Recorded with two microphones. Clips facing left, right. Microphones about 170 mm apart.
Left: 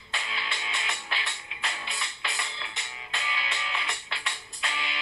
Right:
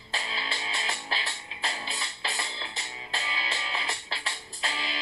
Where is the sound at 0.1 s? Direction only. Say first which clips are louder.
Right 1 dB; 35° right (ahead or behind).